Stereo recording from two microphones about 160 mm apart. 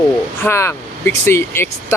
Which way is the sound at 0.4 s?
15° left (ahead or behind).